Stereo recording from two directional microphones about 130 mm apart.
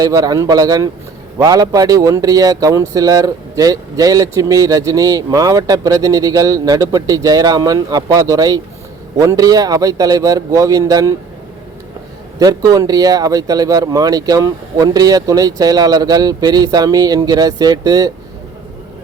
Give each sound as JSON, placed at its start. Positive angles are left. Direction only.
{"t": 0.0, "sound": "speech", "side_deg": -30}
{"t": 12.4, "sound": "speech", "side_deg": -30}